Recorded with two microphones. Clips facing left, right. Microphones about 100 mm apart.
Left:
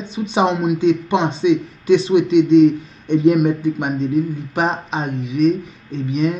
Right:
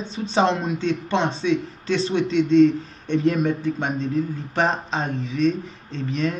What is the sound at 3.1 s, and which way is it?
Speech, 15° left (ahead or behind).